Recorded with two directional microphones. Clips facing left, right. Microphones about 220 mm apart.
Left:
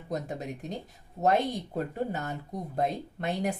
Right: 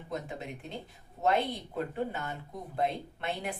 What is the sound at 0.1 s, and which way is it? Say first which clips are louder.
A woman's voice: left 4 dB; 40° left (ahead or behind).